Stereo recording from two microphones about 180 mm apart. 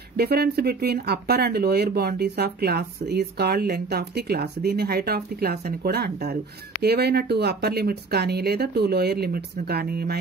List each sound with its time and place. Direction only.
0.2 s speech: 60° right (ahead or behind)